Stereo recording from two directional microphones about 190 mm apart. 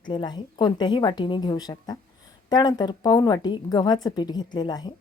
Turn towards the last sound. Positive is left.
turn(degrees=20)  # may be behind; listen again after turning